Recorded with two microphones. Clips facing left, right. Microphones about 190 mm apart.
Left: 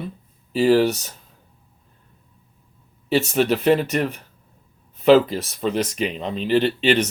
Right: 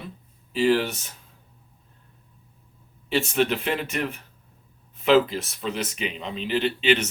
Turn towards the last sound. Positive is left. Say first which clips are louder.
# left 4 dB
turn(degrees=35)  # may be behind; listen again after turning